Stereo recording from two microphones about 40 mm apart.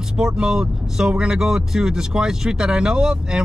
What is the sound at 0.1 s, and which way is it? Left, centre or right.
Speech, centre.